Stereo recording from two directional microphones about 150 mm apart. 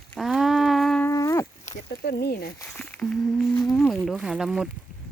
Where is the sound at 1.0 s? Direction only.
20° left (ahead or behind).